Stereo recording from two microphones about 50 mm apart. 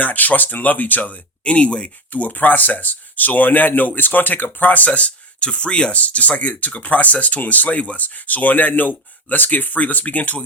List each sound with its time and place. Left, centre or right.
0.0 s speech: left
2.0 s speech: left